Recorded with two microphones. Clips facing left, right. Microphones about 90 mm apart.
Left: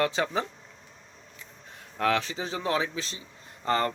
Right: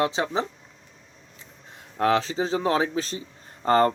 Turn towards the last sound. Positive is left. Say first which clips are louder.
# right 7 dB
turn(degrees=-40)  # may be behind; listen again after turning